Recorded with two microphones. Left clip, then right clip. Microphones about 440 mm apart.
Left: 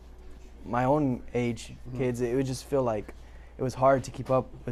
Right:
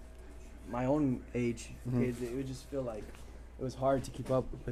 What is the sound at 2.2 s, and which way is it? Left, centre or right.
Speech, left.